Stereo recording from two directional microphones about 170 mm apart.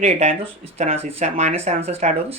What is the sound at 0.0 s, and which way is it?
Speech, 35° right (ahead or behind).